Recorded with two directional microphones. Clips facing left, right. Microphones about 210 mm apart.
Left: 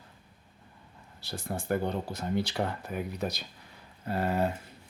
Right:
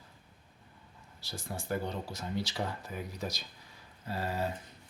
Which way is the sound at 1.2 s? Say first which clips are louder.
Left 5 dB; 60° left (ahead or behind).